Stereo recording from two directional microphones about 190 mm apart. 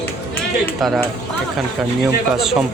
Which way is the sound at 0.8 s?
Centre (ahead or behind).